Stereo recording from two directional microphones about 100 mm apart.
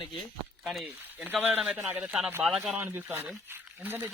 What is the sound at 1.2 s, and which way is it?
Speech, 15° right (ahead or behind).